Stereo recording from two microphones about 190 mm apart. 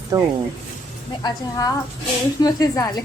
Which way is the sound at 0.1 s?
20° right (ahead or behind).